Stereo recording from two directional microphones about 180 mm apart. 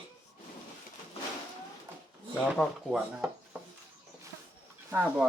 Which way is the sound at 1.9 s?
10° right (ahead or behind).